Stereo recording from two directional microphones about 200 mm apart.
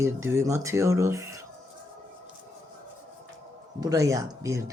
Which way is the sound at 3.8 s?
15° right (ahead or behind).